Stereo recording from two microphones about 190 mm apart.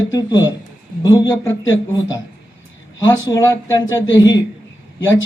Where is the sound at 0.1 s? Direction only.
20° left (ahead or behind).